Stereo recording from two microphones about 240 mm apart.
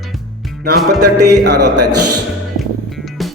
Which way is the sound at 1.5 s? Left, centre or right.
Right.